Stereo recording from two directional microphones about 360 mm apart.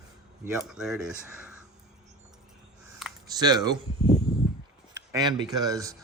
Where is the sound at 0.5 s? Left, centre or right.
Centre.